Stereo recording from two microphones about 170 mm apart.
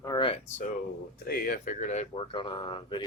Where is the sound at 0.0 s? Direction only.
25° left (ahead or behind).